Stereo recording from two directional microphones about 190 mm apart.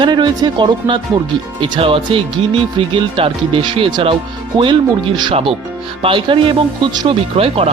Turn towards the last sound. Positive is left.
turn(degrees=-30)  # may be behind; listen again after turning